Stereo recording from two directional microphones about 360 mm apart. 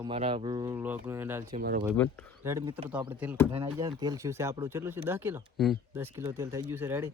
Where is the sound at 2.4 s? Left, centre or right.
Centre.